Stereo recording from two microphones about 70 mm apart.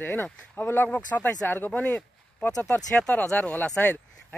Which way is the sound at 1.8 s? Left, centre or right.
Centre.